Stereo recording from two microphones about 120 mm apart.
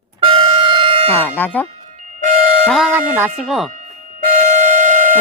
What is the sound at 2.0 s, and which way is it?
Fire alarm, 80° right.